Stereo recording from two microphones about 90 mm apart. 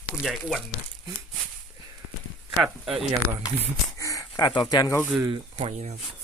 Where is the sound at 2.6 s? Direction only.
5° right (ahead or behind).